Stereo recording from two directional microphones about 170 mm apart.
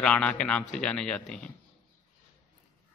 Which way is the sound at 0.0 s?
5° left (ahead or behind).